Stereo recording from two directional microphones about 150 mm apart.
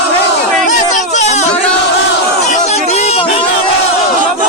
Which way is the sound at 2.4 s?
45° left (ahead or behind).